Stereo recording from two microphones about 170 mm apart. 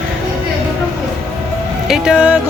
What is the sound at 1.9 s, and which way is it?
Speech, 5° right (ahead or behind).